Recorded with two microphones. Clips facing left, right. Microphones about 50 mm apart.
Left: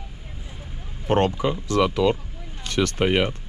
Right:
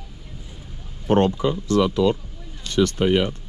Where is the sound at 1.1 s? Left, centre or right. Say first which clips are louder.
Right 2 dB; left.